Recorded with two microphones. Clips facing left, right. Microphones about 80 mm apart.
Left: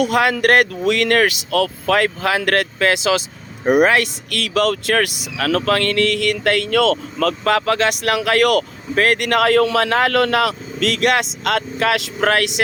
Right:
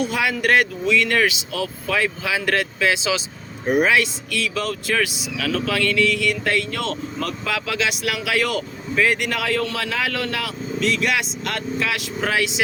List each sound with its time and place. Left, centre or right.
0.0 s speech: left
7.4 s speech: left